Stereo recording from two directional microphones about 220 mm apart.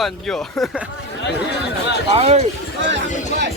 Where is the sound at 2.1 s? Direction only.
30° right (ahead or behind).